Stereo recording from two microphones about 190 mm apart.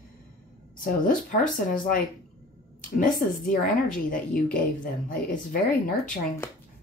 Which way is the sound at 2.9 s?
45° left (ahead or behind).